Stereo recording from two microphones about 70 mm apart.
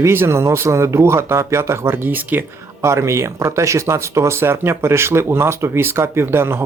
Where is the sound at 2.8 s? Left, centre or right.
Right.